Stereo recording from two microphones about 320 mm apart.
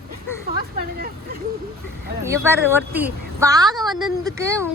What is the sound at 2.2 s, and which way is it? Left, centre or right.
Speech, centre.